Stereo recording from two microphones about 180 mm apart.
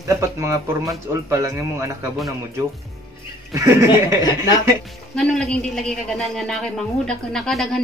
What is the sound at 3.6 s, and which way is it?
Speech, 15° right (ahead or behind).